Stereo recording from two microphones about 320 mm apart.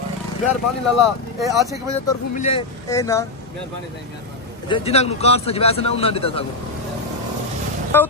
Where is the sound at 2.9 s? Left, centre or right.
Centre.